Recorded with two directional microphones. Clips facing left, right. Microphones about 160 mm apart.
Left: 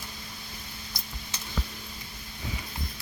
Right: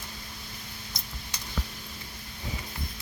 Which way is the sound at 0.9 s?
20° right (ahead or behind).